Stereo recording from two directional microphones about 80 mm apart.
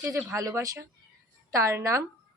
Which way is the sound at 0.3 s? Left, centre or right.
Right.